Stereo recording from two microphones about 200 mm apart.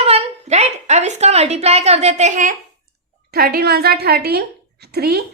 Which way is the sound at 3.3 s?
50° right (ahead or behind).